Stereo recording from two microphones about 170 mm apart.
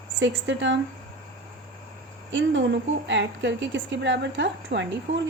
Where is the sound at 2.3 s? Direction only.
90° right.